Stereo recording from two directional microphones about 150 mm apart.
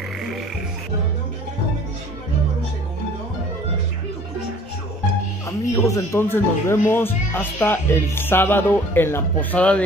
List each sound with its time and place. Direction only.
5.8 s speech: 20° left (ahead or behind)